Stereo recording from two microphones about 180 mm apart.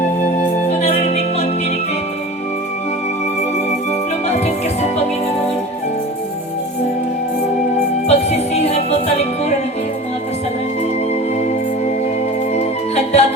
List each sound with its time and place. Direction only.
0.8 s music: 35° left (ahead or behind)
4.3 s music: 35° left (ahead or behind)
8.0 s music: 35° left (ahead or behind)
12.5 s music: 35° left (ahead or behind)